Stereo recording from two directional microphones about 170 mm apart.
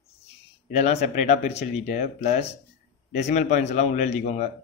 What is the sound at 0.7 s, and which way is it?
A man's voice, 40° left (ahead or behind).